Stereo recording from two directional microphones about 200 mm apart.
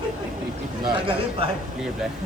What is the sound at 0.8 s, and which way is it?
Speech, 25° right (ahead or behind).